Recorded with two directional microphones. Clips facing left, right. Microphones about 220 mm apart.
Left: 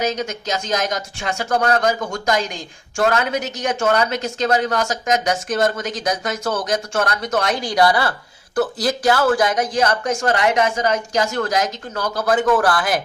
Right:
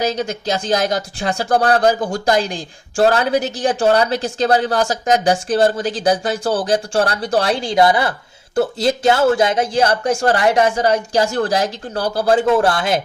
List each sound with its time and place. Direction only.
0.0 s speech: 35° right (ahead or behind)